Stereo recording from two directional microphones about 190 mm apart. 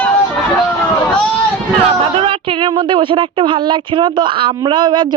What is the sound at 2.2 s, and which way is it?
Speech, 25° right (ahead or behind).